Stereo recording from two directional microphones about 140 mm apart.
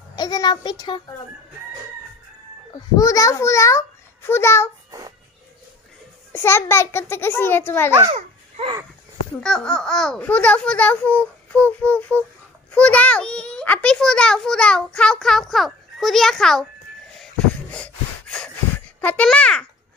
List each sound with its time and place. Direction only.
0.1 s a child's voice: 30° left (ahead or behind)
2.7 s a child's voice: 25° left (ahead or behind)
6.3 s a child's voice: 20° left (ahead or behind)
9.4 s a child's voice: 5° left (ahead or behind)
17.2 s a sound: 5° left (ahead or behind)
18.9 s a child's voice: 10° left (ahead or behind)